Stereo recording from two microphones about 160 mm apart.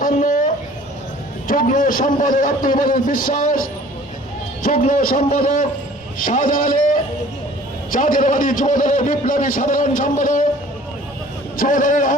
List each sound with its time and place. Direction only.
0.0 s a sound: 55° left (ahead or behind)
1.5 s a man's voice: 60° left (ahead or behind)
11.5 s a man's voice: 60° left (ahead or behind)